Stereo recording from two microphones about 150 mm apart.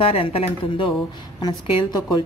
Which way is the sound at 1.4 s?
30° left (ahead or behind).